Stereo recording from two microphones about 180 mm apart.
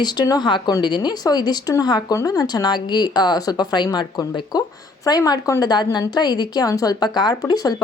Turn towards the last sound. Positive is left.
turn(degrees=20)  # may be behind; listen again after turning